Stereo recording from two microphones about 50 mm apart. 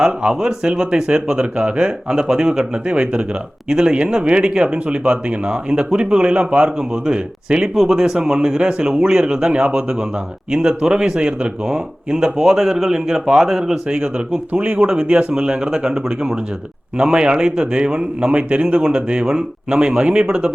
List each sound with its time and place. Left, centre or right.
0.0 s speech: centre
14.5 s speech: right